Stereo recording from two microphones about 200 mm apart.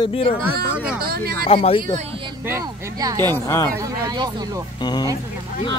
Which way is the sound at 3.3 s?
10° left (ahead or behind).